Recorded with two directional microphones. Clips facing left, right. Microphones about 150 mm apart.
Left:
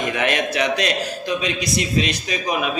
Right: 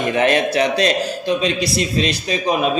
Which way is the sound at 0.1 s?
35° right (ahead or behind).